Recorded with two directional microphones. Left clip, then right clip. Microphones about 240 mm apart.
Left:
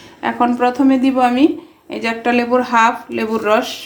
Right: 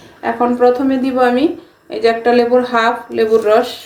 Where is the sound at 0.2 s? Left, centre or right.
Left.